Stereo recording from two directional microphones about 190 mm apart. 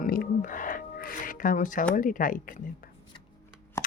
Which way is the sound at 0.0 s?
50° left (ahead or behind).